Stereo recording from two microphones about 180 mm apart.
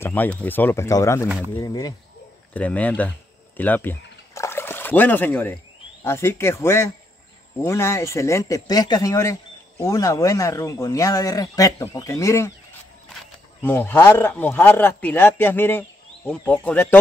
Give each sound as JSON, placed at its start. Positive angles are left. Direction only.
{"t": 0.0, "sound": "speech", "side_deg": 10}
{"t": 2.5, "sound": "speech", "side_deg": 10}
{"t": 3.5, "sound": "a sound", "side_deg": 10}
{"t": 6.0, "sound": "speech", "side_deg": 15}
{"t": 13.6, "sound": "speech", "side_deg": 10}